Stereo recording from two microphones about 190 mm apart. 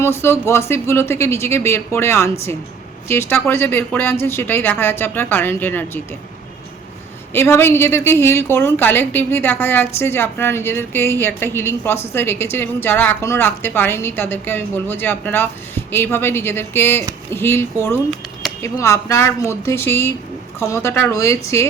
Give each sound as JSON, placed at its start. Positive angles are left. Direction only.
{"t": 0.0, "sound": "a woman's voice", "side_deg": 15}
{"t": 7.3, "sound": "a woman's voice", "side_deg": 15}